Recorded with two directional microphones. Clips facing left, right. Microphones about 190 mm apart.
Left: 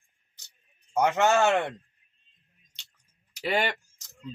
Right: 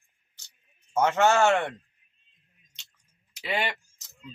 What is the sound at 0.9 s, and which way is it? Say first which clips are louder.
Speech: right 1 dB; 15° left (ahead or behind).